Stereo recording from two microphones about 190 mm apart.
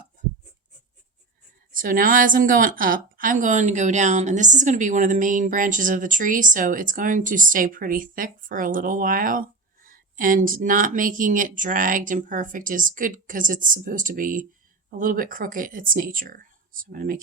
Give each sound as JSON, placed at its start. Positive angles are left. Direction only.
{"t": 1.7, "sound": "a woman's voice", "side_deg": -45}